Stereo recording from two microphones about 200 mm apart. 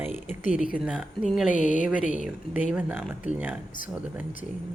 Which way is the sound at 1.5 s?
40° left (ahead or behind).